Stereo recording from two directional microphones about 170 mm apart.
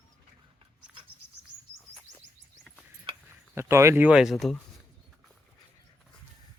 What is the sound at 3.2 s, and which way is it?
Speech, 15° right (ahead or behind).